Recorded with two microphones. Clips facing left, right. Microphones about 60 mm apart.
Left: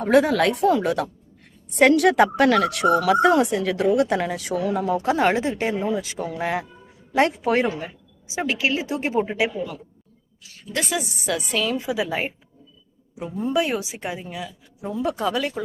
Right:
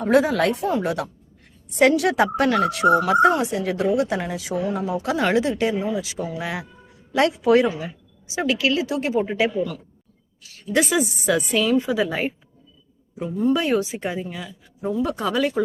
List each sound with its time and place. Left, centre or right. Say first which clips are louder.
0.0 s speech: left 1 dB; left
5.0 s speech: right 1 dB; left
5.8 s speech: left 1 dB; left
8.3 s a woman's voice: right 2 dB; left
9.2 s speech: right 2 dB; centre
10.8 s a woman's voice: right 6 dB; centre